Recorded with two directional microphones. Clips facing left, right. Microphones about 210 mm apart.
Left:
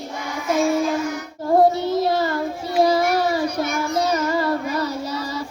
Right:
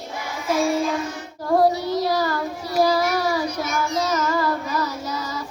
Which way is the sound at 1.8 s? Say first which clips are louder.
Left 2 dB; 25° left (ahead or behind).